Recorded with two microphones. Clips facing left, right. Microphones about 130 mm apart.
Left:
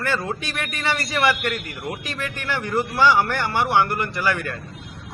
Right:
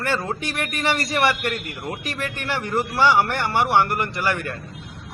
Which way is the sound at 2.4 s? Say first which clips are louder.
Left 1 dB; 20° right (ahead or behind).